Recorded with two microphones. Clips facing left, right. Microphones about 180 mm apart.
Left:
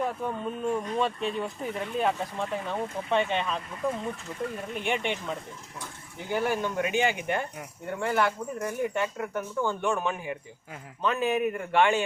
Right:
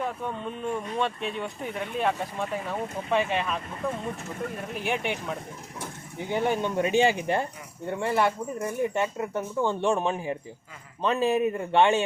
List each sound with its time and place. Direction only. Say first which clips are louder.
0.0 s speech: left 1 dB; 5° left (ahead or behind)
4.7 s speech: right 1 dB; 5° right (ahead or behind)
6.3 s speech: right 2 dB; 25° right (ahead or behind)